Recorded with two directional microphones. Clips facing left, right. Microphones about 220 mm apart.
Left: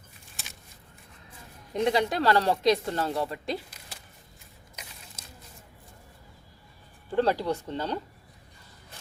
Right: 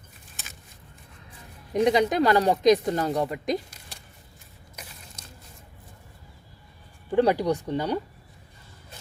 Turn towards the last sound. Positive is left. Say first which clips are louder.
# right 5 dB
turn(degrees=-15)  # may be behind; listen again after turning